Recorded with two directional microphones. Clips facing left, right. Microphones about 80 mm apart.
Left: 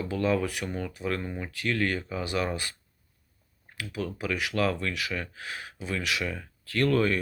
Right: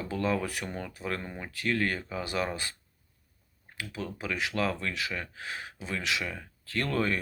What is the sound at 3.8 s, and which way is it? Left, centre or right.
Speech, right.